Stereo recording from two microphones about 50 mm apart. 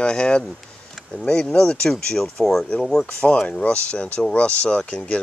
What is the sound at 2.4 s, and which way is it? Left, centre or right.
Speech, centre.